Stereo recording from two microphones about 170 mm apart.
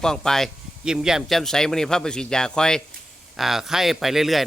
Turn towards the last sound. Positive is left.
turn(degrees=0)  # may be behind; listen again after turning